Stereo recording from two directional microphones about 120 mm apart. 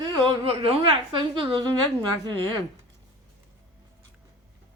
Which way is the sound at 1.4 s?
45° right (ahead or behind).